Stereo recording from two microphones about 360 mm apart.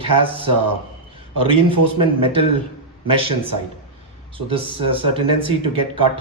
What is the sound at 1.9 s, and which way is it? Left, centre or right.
Speech, centre.